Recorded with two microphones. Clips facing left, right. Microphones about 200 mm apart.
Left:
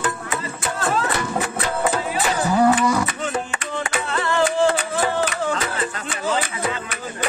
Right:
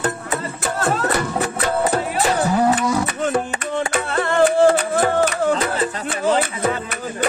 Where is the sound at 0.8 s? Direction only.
40° right (ahead or behind).